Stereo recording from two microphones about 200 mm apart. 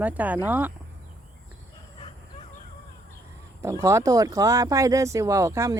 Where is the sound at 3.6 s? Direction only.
15° right (ahead or behind).